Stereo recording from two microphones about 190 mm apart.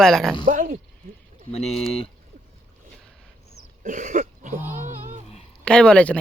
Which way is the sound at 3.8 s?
40° right (ahead or behind).